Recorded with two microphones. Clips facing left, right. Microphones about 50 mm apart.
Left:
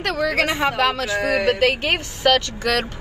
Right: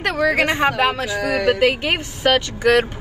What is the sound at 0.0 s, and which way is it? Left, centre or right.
Speech, right.